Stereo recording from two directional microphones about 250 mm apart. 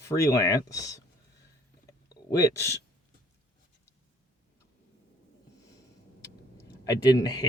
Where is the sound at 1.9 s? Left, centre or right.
Centre.